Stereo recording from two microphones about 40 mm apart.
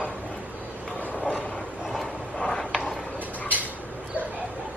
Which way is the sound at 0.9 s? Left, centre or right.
Left.